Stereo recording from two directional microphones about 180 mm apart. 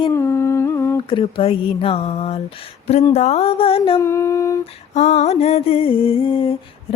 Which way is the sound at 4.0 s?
15° left (ahead or behind).